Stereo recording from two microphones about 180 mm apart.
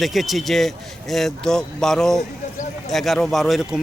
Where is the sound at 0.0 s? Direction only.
Centre (ahead or behind).